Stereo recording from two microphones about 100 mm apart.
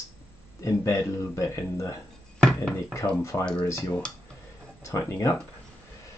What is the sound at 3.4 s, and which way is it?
Speech, 10° left (ahead or behind).